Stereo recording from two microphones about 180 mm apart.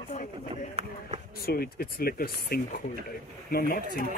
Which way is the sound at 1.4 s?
55° left (ahead or behind).